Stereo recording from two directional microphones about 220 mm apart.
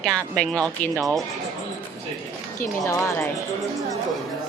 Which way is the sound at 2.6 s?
10° left (ahead or behind).